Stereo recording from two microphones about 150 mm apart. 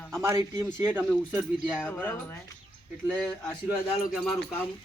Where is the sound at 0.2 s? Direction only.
15° right (ahead or behind).